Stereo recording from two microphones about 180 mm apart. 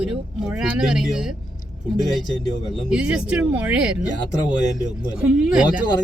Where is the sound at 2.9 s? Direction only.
5° right (ahead or behind).